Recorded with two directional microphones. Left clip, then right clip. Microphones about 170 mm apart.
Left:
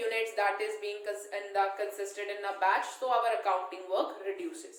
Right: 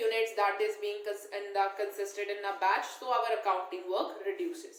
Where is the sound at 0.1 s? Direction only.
20° left (ahead or behind).